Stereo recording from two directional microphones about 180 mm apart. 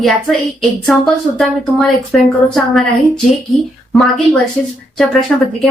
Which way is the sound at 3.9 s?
Centre (ahead or behind).